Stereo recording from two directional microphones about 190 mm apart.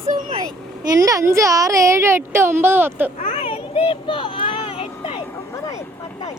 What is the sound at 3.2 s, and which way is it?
Children playing, 40° left (ahead or behind).